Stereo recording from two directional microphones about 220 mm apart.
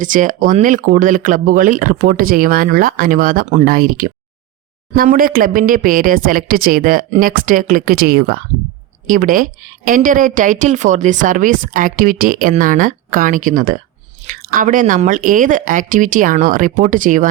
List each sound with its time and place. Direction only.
0.0 s speech: 35° right (ahead or behind)